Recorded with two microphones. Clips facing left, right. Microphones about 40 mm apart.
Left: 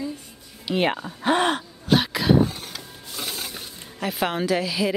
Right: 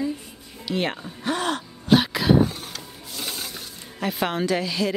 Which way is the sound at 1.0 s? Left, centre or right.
Left.